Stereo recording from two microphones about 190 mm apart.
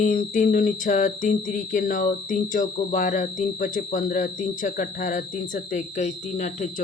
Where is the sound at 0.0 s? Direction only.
45° left (ahead or behind).